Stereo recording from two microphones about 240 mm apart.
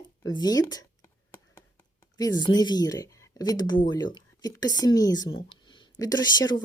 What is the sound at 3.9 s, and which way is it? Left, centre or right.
Speech, centre.